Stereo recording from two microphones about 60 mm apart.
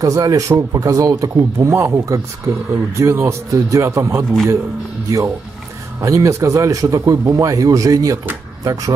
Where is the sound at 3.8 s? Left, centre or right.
Right.